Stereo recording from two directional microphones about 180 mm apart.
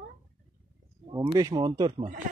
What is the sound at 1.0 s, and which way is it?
Speech, 25° right (ahead or behind).